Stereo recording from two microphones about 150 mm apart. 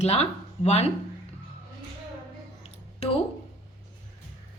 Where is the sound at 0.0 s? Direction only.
45° left (ahead or behind).